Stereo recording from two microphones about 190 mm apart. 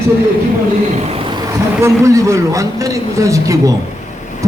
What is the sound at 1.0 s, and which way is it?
A man's voice, 30° right (ahead or behind).